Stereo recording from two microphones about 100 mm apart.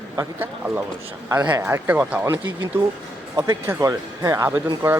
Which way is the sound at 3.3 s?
25° right (ahead or behind).